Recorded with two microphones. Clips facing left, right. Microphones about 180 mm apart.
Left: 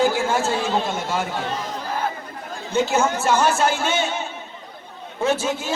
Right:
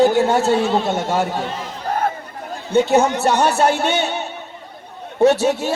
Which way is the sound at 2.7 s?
65° right (ahead or behind).